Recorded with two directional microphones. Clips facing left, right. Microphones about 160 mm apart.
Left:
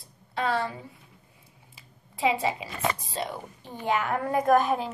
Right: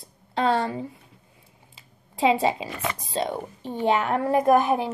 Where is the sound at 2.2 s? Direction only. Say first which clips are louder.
Right 5 dB; 25° right (ahead or behind).